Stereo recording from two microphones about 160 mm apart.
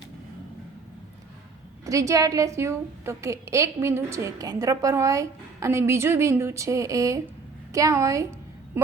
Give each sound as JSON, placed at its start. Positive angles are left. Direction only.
{"t": 1.8, "sound": "a woman's voice", "side_deg": -20}